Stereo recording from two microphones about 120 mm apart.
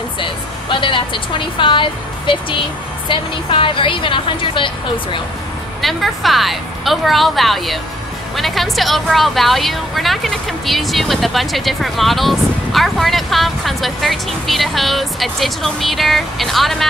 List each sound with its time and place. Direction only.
0.2 s speech: 45° left (ahead or behind)
5.8 s a woman's voice: centre (ahead or behind)